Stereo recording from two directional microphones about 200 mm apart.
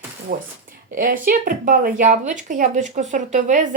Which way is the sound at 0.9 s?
45° right (ahead or behind).